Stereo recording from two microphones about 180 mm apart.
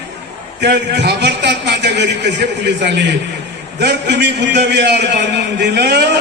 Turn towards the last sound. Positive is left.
turn(degrees=-65)  # may be behind; listen again after turning